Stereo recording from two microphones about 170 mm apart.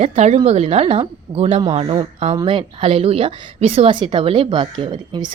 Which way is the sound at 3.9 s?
25° right (ahead or behind).